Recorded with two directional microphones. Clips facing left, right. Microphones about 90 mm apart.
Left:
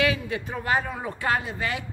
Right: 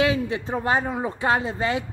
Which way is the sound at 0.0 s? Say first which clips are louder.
Right 3 dB; 25° right (ahead or behind).